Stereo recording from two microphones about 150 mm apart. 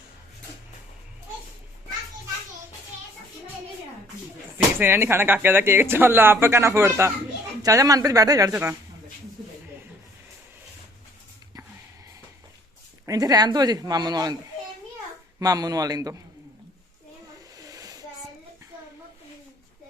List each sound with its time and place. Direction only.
4.5 s speech: 15° right (ahead or behind)
13.1 s speech: 25° right (ahead or behind)
15.4 s speech: 25° right (ahead or behind)
17.6 s hair dryer: 25° right (ahead or behind)